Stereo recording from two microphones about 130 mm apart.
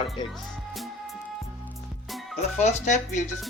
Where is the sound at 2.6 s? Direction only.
60° left (ahead or behind).